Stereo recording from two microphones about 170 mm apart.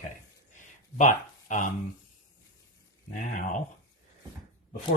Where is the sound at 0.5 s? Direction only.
45° left (ahead or behind).